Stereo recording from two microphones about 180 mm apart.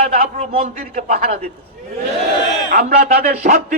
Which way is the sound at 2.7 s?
50° right (ahead or behind).